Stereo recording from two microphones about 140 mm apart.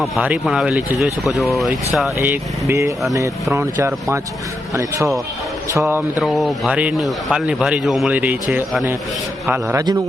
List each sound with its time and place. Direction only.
0.0 s speech: 5° right (ahead or behind)
2.1 s speech: 15° right (ahead or behind)
6.1 s a man's voice: centre (ahead or behind)